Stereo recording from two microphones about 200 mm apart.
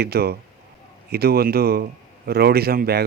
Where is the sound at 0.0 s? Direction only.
50° right (ahead or behind).